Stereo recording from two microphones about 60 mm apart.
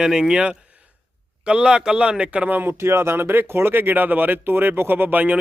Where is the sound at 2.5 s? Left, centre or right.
Right.